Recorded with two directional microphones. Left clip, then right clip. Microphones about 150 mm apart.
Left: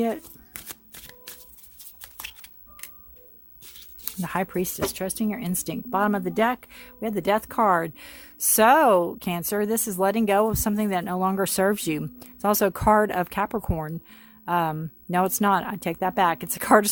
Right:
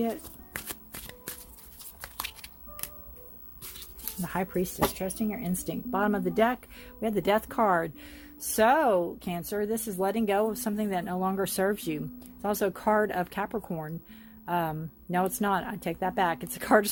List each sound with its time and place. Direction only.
2.0 s a sound: 15° left (ahead or behind)
4.0 s speech: 50° left (ahead or behind); by 6.0 s 70° left (ahead or behind)
6.0 s speech: 45° left (ahead or behind)